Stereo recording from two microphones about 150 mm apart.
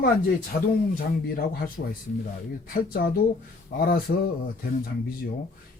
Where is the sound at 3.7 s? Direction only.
85° left.